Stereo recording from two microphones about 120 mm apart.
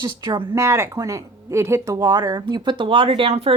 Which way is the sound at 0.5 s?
25° right (ahead or behind).